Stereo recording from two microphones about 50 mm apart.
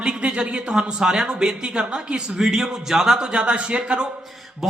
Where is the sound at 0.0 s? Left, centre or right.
Centre.